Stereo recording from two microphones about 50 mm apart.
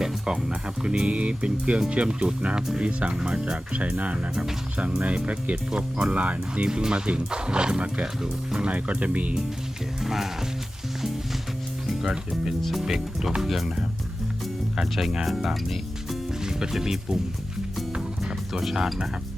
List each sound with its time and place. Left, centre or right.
0.0 s speech: centre
6.7 s speech: centre
8.6 s speech: right
10.0 s speech: centre
11.9 s speech: centre
17.9 s music: centre
18.6 s speech: centre